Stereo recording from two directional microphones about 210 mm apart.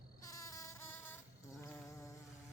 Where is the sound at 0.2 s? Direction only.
15° left (ahead or behind).